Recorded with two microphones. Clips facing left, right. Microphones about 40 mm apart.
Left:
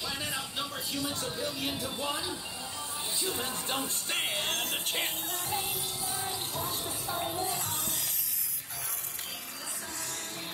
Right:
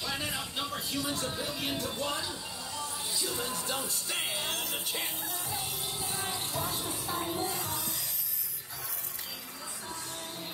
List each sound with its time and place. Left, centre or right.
0.0 s music: centre
2.0 s speech: centre
3.2 s speech: left
4.8 s music: left
7.5 s music: left